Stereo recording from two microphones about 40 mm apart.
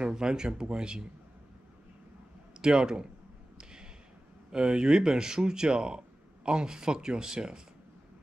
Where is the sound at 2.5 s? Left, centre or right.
Centre.